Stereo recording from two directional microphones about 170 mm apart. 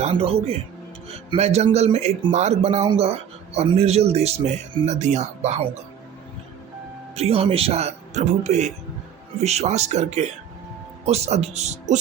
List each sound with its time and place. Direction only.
0.0 s a man's voice: 35° right (ahead or behind)
7.2 s a man's voice: 35° right (ahead or behind)